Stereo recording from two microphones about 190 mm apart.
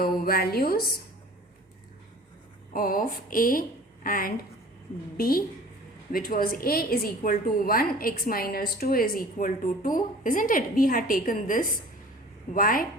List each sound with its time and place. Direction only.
0.0 s a woman's voice: 50° left (ahead or behind)
2.7 s a woman's voice: 50° left (ahead or behind)